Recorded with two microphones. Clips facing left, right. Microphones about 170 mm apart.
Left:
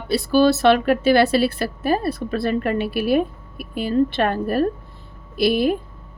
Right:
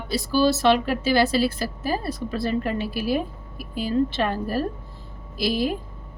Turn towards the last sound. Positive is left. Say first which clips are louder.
# left 6 dB
turn(degrees=60)  # may be behind; listen again after turning